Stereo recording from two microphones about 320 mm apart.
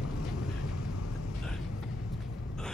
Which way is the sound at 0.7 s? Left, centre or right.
Left.